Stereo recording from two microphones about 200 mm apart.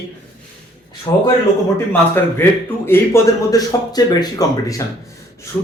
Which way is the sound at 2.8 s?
10° left (ahead or behind).